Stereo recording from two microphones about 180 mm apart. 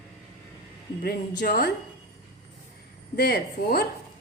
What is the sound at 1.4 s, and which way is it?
Speech, 65° left (ahead or behind).